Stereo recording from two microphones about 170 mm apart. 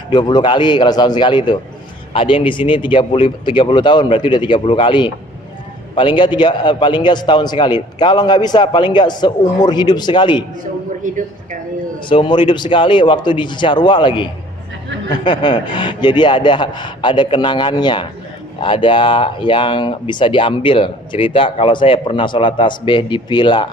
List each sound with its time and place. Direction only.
0.1 s a man's voice: 25° left (ahead or behind)
11.0 s a woman's voice: 50° right (ahead or behind)
12.0 s speech: 30° left (ahead or behind)